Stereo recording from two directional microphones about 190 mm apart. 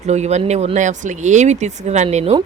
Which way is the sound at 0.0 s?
35° right (ahead or behind).